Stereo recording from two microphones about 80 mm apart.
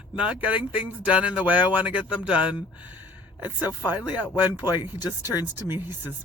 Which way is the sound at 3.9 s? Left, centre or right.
Centre.